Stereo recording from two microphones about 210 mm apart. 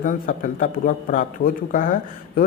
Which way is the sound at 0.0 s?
40° left (ahead or behind).